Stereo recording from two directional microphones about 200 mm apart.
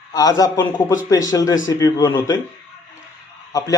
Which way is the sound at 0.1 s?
20° left (ahead or behind).